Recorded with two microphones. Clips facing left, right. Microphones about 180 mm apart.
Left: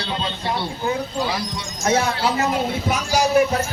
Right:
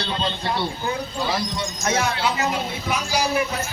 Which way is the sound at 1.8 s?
30° left (ahead or behind).